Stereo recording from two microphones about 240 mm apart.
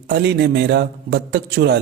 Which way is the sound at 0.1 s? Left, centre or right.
Right.